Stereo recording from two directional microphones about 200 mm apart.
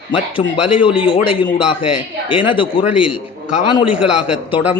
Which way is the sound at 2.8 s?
5° right (ahead or behind).